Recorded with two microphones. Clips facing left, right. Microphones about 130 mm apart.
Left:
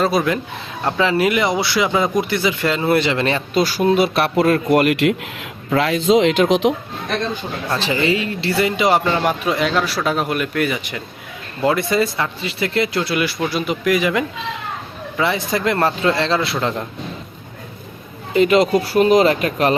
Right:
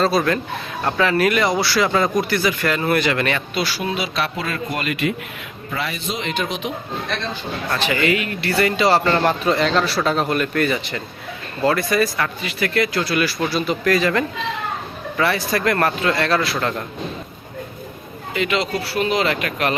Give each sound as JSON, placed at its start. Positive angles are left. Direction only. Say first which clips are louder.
{"t": 0.1, "sound": "a man's voice", "louder": "even", "side_deg": 20}
{"t": 3.5, "sound": "speech", "louder": "left 8 dB", "side_deg": 40}
{"t": 5.7, "sound": "speech", "louder": "left 12 dB", "side_deg": 90}
{"t": 7.9, "sound": "a man's voice", "louder": "left 1 dB", "side_deg": 25}
{"t": 11.6, "sound": "speech", "louder": "left 1 dB", "side_deg": 20}
{"t": 18.3, "sound": "speech", "louder": "left 8 dB", "side_deg": 40}